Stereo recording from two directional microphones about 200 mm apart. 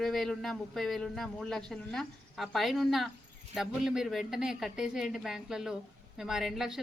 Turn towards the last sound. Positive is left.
turn(degrees=0)  # may be behind; listen again after turning